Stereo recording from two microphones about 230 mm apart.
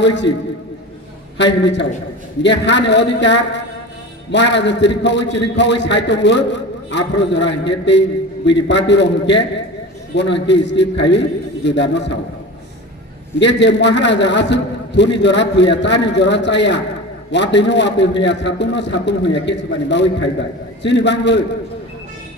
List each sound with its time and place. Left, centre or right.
0.0 s a man's voice: left
1.4 s a man's voice: left
13.4 s a man's voice: left